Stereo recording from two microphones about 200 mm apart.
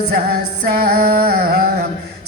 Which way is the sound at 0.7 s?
50° right (ahead or behind).